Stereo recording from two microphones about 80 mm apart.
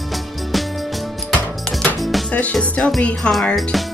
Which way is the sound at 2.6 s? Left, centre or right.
Centre.